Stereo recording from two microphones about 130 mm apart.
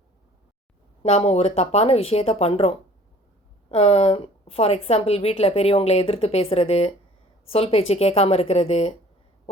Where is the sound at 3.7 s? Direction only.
50° left (ahead or behind).